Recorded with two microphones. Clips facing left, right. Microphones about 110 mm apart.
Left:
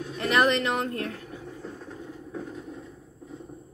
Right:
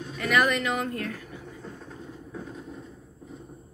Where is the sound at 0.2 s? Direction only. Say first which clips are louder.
Left 1 dB; 30° left (ahead or behind).